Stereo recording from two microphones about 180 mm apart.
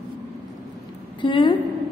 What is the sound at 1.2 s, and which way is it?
Speech, 25° left (ahead or behind).